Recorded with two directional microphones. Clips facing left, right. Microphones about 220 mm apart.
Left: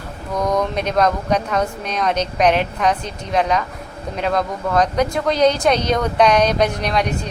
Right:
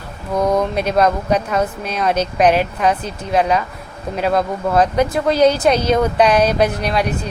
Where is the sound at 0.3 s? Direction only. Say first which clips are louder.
Right 3 dB; 30° right (ahead or behind).